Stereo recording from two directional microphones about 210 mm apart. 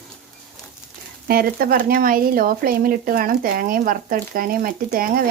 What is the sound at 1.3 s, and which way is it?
Speech, 45° right (ahead or behind).